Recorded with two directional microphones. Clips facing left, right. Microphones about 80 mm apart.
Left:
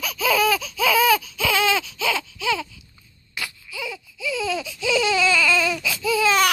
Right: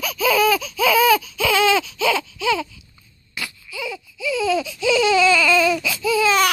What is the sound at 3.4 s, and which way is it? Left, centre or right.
Baby cry, centre.